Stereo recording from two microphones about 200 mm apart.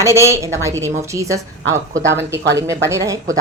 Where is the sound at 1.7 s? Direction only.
65° right (ahead or behind).